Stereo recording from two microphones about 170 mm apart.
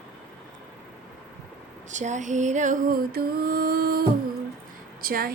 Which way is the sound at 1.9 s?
45° right (ahead or behind).